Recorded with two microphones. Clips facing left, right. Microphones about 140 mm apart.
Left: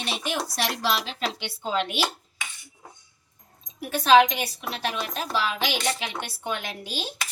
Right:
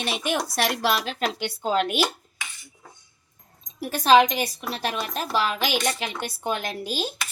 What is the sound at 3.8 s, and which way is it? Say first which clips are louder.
A woman's voice: even; 40° right (ahead or behind).